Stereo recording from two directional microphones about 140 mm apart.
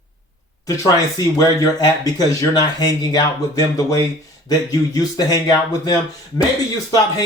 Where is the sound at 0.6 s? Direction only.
25° left (ahead or behind).